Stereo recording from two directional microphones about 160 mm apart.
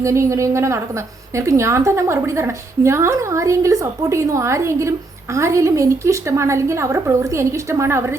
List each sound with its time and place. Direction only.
0.0 s a woman's voice: 20° right (ahead or behind)